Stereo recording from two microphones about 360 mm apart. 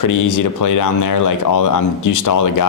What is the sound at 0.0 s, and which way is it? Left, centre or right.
A man's voice, left.